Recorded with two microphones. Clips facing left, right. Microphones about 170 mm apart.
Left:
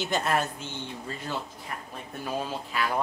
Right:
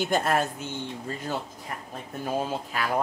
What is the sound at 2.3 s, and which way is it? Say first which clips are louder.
Speech: right 3 dB; 45° right (ahead or behind).